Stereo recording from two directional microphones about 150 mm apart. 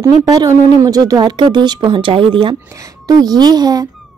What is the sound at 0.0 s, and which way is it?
Speech, 25° right (ahead or behind).